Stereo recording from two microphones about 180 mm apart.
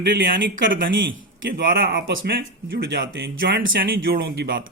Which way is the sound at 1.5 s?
55° right (ahead or behind).